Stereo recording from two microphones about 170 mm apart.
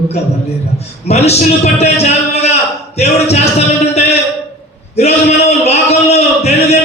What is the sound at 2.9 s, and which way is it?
Speech, 40° left (ahead or behind).